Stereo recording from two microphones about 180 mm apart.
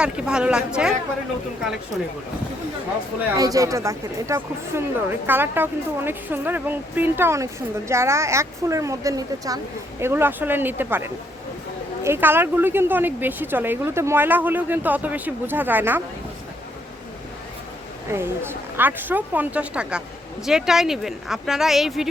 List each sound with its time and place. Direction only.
0.0 s speech: 5° right (ahead or behind)
3.3 s speech: 20° right (ahead or behind)
12.0 s speech: 10° right (ahead or behind)
18.1 s speech: 10° right (ahead or behind)